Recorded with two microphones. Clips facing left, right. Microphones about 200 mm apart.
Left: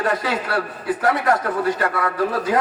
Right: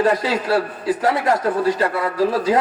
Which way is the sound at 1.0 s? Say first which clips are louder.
Even; 25° right (ahead or behind).